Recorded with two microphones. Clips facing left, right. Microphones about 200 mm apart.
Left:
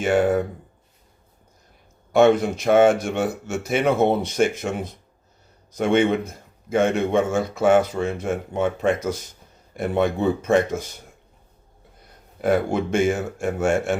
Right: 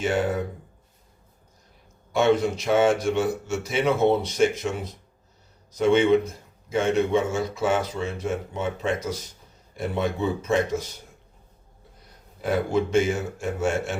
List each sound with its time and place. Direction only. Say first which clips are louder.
0.0 s a man's voice: left 5 dB; 55° left (ahead or behind)
2.1 s a man's voice: left 4 dB; 50° left (ahead or behind)
12.4 s a man's voice: left 3 dB; 55° left (ahead or behind)